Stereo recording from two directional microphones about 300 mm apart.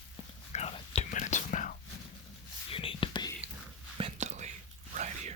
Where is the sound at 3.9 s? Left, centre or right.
Right.